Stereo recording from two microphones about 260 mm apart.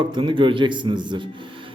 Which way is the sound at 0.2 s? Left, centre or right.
Centre.